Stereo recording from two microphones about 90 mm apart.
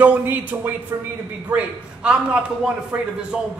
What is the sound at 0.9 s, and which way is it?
Speech, 30° right (ahead or behind).